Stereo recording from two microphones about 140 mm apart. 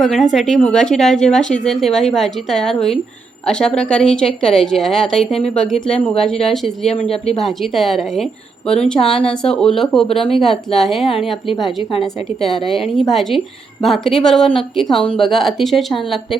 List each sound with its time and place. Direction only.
0.0 s speech: centre (ahead or behind)
11.8 s a woman's voice: 40° left (ahead or behind)
13.0 s speech: centre (ahead or behind)